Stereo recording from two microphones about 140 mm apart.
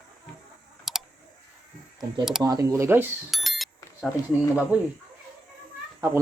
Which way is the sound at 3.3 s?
Centre (ahead or behind).